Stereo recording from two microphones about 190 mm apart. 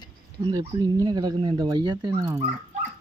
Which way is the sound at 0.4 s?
20° right (ahead or behind).